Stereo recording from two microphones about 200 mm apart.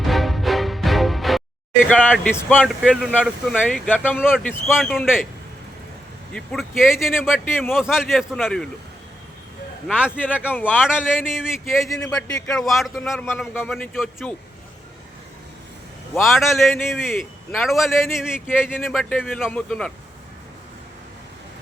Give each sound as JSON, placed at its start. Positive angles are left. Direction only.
{"t": 0.0, "sound": "music", "side_deg": 0}
{"t": 1.9, "sound": "a man's voice", "side_deg": 10}
{"t": 4.1, "sound": "a man's voice", "side_deg": -5}
{"t": 4.4, "sound": "speech", "side_deg": 10}
{"t": 4.8, "sound": "a man's voice", "side_deg": 0}
{"t": 6.3, "sound": "a man's voice", "side_deg": 0}
{"t": 9.8, "sound": "a man's voice", "side_deg": -5}
{"t": 10.1, "sound": "speech", "side_deg": 10}
{"t": 11.3, "sound": "a man's voice", "side_deg": 0}
{"t": 16.2, "sound": "a man's voice", "side_deg": 0}